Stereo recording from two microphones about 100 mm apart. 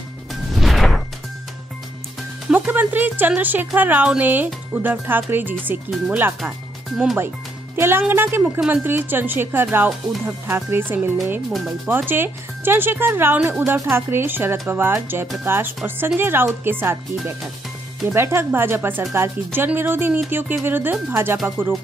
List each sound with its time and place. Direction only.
0.3 s music: centre (ahead or behind)
2.5 s speech: 15° right (ahead or behind)
7.7 s speech: 25° right (ahead or behind)
11.5 s speech: 5° right (ahead or behind)
11.9 s speech: 20° right (ahead or behind)
18.0 s speech: 25° right (ahead or behind)